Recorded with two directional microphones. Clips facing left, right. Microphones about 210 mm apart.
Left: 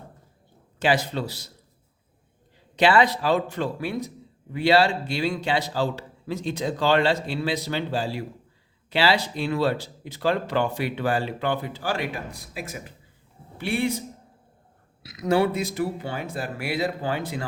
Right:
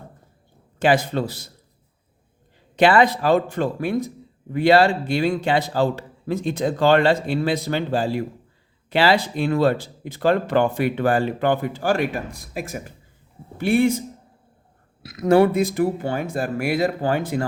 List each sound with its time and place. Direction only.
0.8 s speech: 50° right (ahead or behind)
2.7 s speech: 50° right (ahead or behind)
15.0 s speech: 50° right (ahead or behind)